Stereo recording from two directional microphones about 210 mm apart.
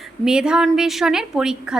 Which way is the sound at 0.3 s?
5° right (ahead or behind).